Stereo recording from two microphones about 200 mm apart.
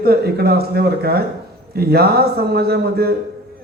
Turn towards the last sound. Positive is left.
turn(degrees=-50)  # may be behind; listen again after turning